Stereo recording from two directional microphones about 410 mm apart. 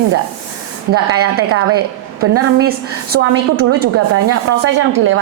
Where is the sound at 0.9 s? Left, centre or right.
Right.